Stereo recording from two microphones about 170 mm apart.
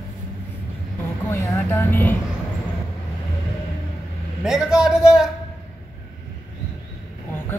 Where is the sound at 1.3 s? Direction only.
15° left (ahead or behind).